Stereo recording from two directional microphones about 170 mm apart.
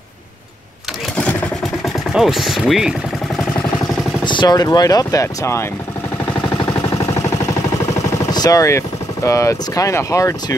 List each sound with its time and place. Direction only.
2.1 s chopping: centre (ahead or behind)
4.2 s speech: 25° left (ahead or behind)
7.8 s speech: 20° left (ahead or behind)